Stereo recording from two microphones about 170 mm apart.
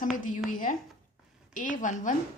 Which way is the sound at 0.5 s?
50° left (ahead or behind).